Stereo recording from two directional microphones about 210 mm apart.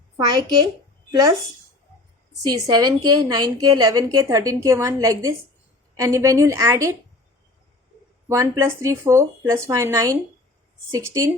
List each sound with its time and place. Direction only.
0.3 s a child's voice: 20° right (ahead or behind)
2.4 s a woman's voice: 20° right (ahead or behind)
8.3 s a woman's voice: 15° right (ahead or behind)